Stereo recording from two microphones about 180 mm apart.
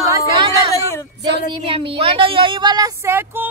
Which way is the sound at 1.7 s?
30° right (ahead or behind).